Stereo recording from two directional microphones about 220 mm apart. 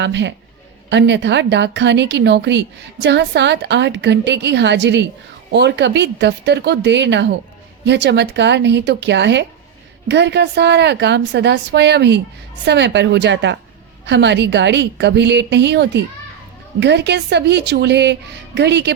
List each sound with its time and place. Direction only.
0.0 s a woman's voice: 55° right (ahead or behind)